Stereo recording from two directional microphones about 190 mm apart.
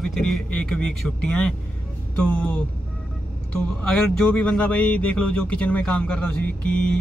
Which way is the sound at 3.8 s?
5° left (ahead or behind).